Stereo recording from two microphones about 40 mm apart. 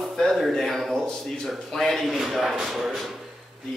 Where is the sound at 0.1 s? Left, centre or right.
Centre.